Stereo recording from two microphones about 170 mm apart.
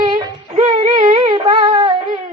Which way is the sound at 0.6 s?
35° right (ahead or behind).